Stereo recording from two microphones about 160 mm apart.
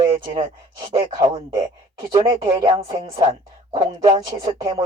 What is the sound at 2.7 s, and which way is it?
Speech, 35° right (ahead or behind).